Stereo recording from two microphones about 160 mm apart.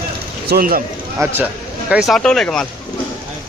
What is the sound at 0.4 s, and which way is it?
Speech, 75° right (ahead or behind).